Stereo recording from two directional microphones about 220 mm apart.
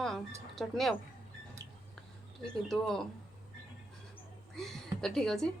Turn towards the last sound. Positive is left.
turn(degrees=0)  # may be behind; listen again after turning